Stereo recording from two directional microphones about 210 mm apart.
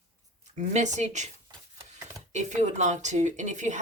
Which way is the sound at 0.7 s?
35° right (ahead or behind).